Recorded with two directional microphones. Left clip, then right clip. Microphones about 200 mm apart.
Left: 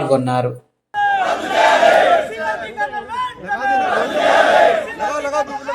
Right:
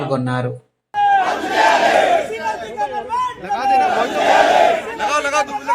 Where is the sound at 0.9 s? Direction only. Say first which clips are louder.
Right 2 dB; centre (ahead or behind).